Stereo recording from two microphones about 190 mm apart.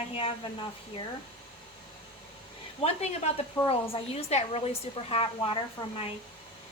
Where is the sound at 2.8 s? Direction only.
35° left (ahead or behind).